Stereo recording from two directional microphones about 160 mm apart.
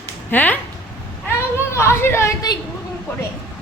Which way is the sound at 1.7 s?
15° left (ahead or behind).